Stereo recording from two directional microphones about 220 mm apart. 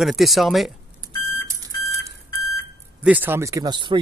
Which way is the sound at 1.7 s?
15° left (ahead or behind).